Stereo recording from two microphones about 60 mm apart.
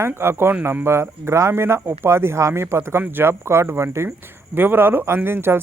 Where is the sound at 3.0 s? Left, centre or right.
Right.